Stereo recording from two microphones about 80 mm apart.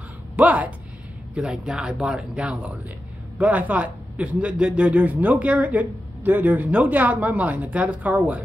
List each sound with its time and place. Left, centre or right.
0.4 s speech: centre